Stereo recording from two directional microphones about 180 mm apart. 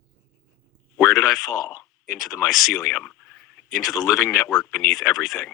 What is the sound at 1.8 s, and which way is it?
Speech, centre (ahead or behind).